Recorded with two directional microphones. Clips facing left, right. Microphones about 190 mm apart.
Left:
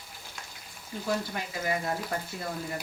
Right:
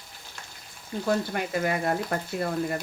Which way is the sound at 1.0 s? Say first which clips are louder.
Right 5 dB; 60° right (ahead or behind).